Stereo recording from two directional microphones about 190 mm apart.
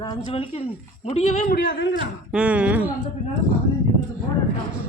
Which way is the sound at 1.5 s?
55° left (ahead or behind).